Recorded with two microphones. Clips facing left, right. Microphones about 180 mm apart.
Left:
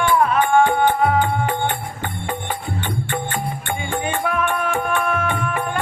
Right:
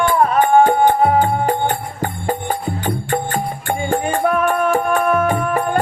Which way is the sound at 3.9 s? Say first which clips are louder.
Right 6 dB; 40° right (ahead or behind).